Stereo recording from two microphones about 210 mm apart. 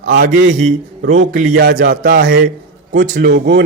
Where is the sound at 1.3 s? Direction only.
60° right (ahead or behind).